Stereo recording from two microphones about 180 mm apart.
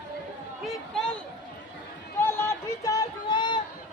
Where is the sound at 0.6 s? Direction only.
5° left (ahead or behind).